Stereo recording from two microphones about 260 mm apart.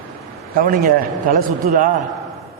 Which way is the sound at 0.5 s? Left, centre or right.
Right.